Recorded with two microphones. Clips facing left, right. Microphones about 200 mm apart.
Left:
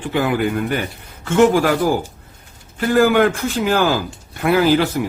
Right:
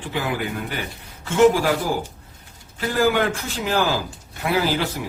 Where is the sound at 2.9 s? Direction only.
55° left (ahead or behind).